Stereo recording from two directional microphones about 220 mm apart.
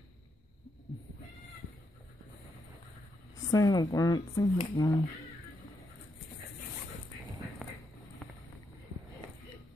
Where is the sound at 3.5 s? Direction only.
15° left (ahead or behind).